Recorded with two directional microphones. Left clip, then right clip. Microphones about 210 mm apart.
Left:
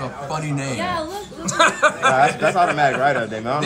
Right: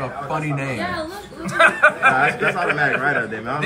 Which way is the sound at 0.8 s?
30° left (ahead or behind).